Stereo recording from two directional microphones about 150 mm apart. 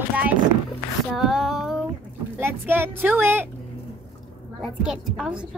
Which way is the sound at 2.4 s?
15° right (ahead or behind).